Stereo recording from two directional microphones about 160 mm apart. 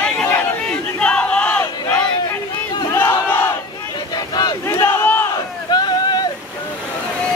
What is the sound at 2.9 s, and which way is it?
Crowd, 15° left (ahead or behind).